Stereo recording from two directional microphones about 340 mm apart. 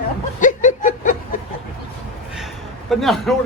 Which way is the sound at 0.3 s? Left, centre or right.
Left.